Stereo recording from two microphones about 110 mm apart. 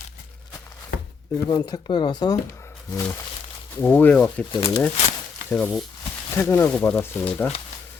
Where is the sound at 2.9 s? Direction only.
20° left (ahead or behind).